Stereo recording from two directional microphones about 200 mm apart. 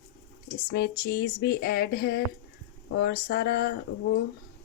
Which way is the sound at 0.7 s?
55° left (ahead or behind).